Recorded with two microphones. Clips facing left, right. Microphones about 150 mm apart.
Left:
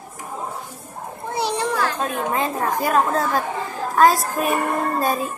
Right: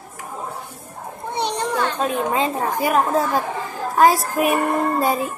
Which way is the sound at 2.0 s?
20° right (ahead or behind).